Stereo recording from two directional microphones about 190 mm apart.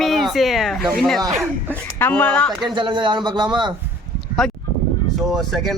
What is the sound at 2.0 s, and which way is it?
Speech, 10° left (ahead or behind).